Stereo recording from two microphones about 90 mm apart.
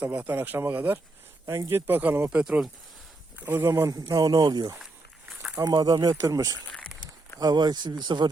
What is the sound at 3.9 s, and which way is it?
Speech, 45° right (ahead or behind).